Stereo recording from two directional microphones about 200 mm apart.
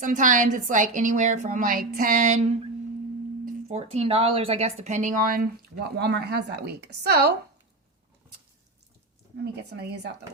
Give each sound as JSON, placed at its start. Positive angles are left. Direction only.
{"t": 0.0, "sound": "a woman's voice", "side_deg": -40}
{"t": 6.0, "sound": "speech", "side_deg": -55}
{"t": 9.4, "sound": "speech", "side_deg": -55}